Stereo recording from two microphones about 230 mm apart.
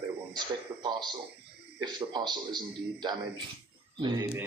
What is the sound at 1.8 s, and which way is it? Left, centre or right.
A man's voice, centre.